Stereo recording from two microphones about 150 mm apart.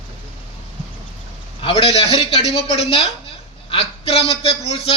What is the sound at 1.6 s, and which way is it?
A man's voice, 35° left (ahead or behind).